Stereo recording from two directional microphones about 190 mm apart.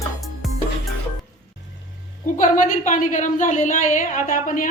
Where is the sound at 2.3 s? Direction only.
45° left (ahead or behind).